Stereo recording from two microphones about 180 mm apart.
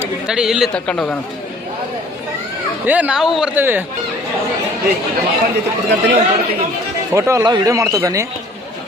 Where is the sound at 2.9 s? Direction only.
5° right (ahead or behind).